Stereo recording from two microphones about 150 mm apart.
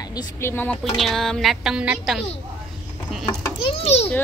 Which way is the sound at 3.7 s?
40° left (ahead or behind).